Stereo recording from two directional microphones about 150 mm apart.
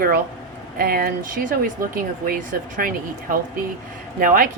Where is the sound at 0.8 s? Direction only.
80° right.